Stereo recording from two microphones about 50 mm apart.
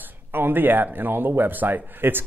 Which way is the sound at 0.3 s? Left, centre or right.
Right.